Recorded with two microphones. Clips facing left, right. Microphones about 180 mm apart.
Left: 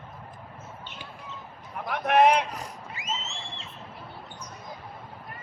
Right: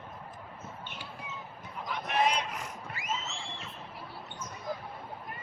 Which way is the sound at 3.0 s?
20° left (ahead or behind).